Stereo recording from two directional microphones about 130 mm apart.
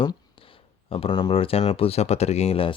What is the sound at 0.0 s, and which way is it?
Speech, 40° left (ahead or behind).